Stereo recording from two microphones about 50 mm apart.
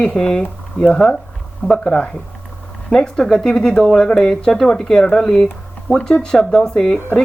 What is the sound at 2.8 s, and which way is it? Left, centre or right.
Speech, centre.